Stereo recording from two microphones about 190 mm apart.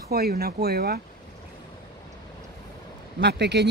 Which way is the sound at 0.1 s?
55° right (ahead or behind).